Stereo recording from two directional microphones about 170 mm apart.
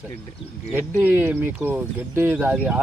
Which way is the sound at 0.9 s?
10° right (ahead or behind).